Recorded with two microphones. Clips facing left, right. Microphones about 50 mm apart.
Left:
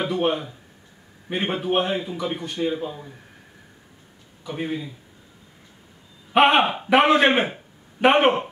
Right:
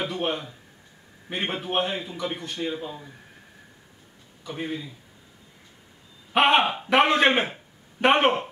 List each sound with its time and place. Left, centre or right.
0.0 s a man's voice: centre
4.5 s speech: centre
6.3 s a man's voice: centre